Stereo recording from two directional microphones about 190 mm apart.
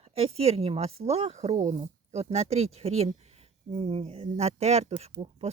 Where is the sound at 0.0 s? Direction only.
30° right (ahead or behind).